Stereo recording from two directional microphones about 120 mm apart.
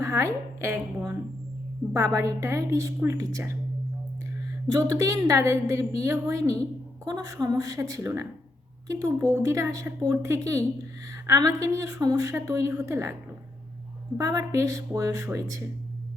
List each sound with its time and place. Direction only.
0.0 s a woman's voice: 25° right (ahead or behind)
4.7 s a woman's voice: 25° right (ahead or behind)
14.2 s a woman's voice: 30° right (ahead or behind)